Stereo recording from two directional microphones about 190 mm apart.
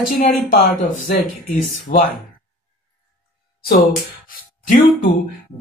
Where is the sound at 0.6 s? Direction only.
35° left (ahead or behind).